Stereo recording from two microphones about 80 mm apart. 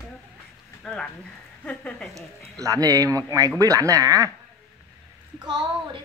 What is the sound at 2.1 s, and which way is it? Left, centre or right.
Speech, right.